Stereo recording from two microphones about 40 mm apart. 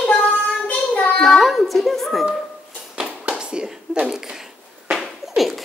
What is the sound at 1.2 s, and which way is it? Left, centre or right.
A woman's voice, centre.